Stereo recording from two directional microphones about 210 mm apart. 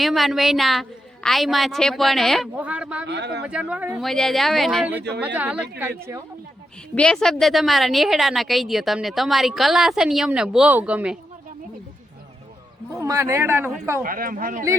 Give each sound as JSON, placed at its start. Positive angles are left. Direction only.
{"t": 0.0, "sound": "a woman's voice", "side_deg": 0}
{"t": 3.1, "sound": "speech", "side_deg": -55}
{"t": 3.4, "sound": "a woman's voice", "side_deg": -5}
{"t": 4.9, "sound": "speech", "side_deg": -50}
{"t": 5.2, "sound": "speech", "side_deg": -5}
{"t": 6.9, "sound": "a woman's voice", "side_deg": 5}
{"t": 12.9, "sound": "a man's voice", "side_deg": -15}
{"t": 14.0, "sound": "speech", "side_deg": -40}